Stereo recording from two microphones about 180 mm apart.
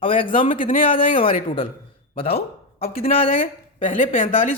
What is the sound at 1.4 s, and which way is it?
Speech, 50° left (ahead or behind).